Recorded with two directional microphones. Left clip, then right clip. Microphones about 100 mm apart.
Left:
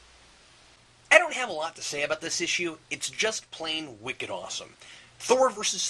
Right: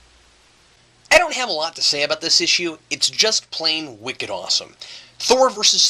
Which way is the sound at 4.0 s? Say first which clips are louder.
Right 7 dB; 45° right (ahead or behind).